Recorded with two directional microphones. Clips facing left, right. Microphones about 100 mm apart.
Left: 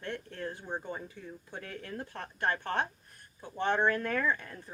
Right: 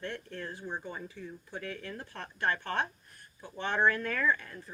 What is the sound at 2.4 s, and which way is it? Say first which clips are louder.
Speech: even; 20° left (ahead or behind).